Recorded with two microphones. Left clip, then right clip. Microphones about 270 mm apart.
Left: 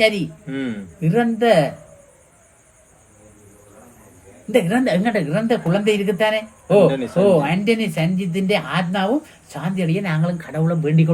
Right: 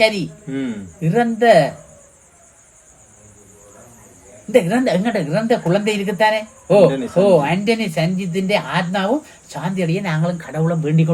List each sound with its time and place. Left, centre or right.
0.0 s a woman's voice: centre
4.5 s a woman's voice: centre